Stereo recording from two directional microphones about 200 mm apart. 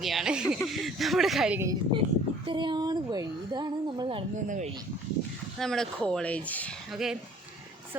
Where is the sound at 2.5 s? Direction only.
25° right (ahead or behind).